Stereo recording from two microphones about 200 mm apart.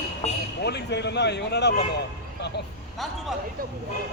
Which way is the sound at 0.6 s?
55° left (ahead or behind).